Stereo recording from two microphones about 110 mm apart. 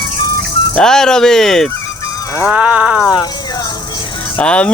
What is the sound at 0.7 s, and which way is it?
Speech, 5° left (ahead or behind).